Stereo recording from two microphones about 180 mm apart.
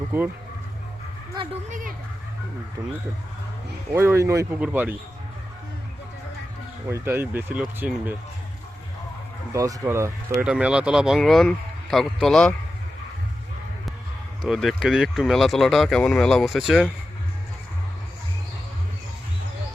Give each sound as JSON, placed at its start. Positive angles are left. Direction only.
{"t": 0.1, "sound": "speech", "side_deg": -10}
{"t": 3.9, "sound": "speech", "side_deg": -15}
{"t": 6.9, "sound": "speech", "side_deg": -10}
{"t": 9.5, "sound": "speech", "side_deg": -15}
{"t": 14.4, "sound": "speech", "side_deg": 0}